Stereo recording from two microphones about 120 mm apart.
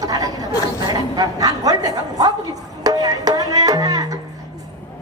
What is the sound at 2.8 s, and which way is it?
Music, 30° right (ahead or behind).